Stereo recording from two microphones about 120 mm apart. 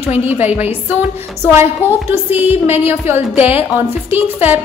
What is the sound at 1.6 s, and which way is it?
A woman's voice, 20° right (ahead or behind).